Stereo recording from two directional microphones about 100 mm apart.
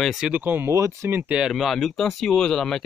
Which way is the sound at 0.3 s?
20° right (ahead or behind).